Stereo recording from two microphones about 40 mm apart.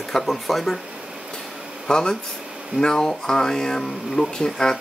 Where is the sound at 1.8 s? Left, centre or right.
Centre.